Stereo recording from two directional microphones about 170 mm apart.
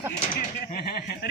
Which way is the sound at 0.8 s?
65° left (ahead or behind).